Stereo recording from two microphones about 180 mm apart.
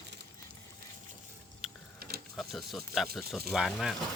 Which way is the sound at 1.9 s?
55° right (ahead or behind).